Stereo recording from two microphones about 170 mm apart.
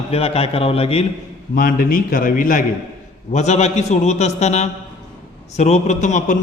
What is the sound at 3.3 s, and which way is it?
A man's voice, 40° left (ahead or behind).